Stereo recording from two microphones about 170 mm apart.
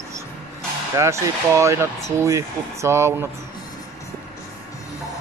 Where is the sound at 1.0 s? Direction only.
15° right (ahead or behind).